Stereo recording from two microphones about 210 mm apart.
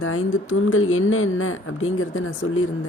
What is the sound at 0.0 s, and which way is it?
Speech, 80° left.